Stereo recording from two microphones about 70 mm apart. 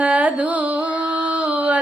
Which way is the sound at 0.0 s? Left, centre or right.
Centre.